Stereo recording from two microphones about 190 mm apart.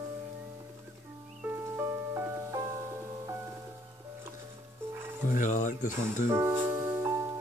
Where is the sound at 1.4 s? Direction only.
10° right (ahead or behind).